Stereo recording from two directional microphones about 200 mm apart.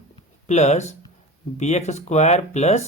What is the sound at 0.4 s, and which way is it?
Speech, 35° left (ahead or behind).